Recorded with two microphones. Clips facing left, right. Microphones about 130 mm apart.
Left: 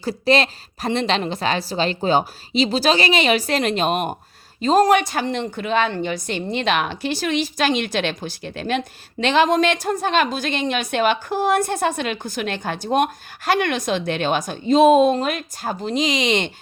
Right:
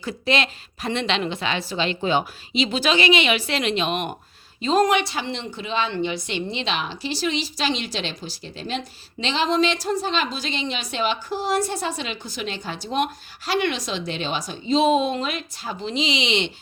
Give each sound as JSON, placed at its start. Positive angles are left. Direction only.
{"t": 0.0, "sound": "a woman's voice", "side_deg": 35}